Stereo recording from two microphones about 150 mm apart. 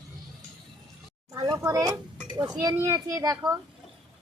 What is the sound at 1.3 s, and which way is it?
A woman's voice, 25° right (ahead or behind).